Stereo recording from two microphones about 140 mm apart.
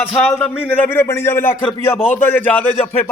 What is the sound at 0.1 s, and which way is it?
Speech, 10° left (ahead or behind).